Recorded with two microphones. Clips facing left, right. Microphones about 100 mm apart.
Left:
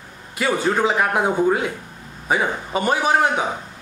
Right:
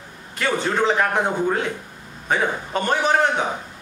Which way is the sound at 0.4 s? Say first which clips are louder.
Left 2 dB; 10° left (ahead or behind).